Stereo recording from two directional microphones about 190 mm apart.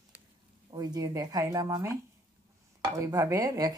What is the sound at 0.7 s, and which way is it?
Speech, 20° right (ahead or behind).